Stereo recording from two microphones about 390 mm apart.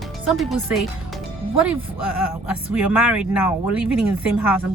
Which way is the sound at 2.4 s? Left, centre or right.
Centre.